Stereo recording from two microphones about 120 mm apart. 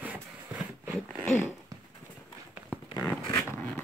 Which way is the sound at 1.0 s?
15° left (ahead or behind).